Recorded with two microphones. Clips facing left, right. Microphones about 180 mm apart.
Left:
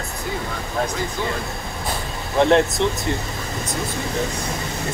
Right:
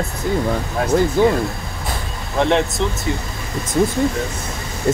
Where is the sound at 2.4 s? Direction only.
Centre (ahead or behind).